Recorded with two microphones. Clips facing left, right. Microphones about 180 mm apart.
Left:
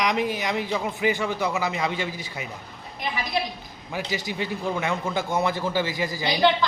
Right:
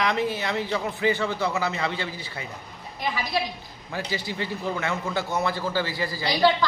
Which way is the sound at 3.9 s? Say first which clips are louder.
Left 1 dB; 15° left (ahead or behind).